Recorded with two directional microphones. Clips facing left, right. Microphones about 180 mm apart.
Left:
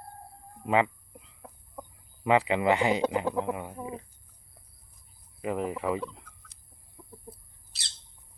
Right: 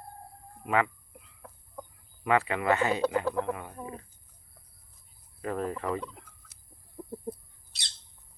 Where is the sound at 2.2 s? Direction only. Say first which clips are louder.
Left 2 dB; 20° left (ahead or behind).